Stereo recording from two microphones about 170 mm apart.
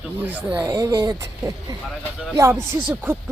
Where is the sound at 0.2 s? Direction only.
10° right (ahead or behind).